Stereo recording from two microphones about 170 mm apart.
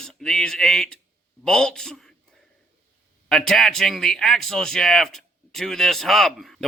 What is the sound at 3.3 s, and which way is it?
A man's voice, centre (ahead or behind).